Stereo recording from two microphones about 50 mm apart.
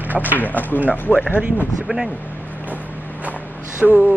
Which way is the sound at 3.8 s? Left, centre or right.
Right.